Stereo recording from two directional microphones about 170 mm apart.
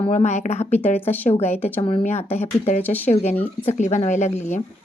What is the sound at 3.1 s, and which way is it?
A woman's voice, 40° left (ahead or behind).